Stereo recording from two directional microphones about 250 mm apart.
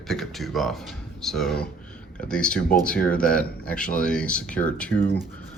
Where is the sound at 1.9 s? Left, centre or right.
Centre.